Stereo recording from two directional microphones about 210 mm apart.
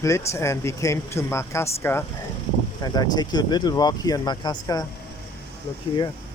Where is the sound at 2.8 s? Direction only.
20° left (ahead or behind).